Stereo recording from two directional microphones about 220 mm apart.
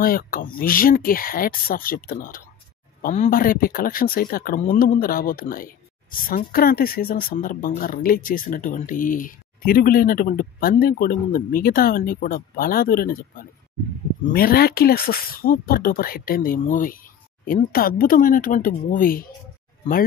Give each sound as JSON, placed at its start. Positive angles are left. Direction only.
{"t": 0.0, "sound": "speech", "side_deg": 40}